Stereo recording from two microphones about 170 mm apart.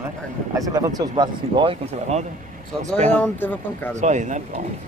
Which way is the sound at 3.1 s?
10° left (ahead or behind).